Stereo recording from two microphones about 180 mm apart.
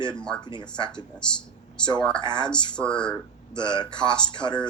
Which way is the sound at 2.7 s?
5° left (ahead or behind).